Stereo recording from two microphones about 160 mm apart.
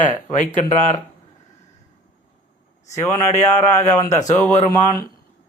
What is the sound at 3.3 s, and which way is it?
Speech, 45° left (ahead or behind).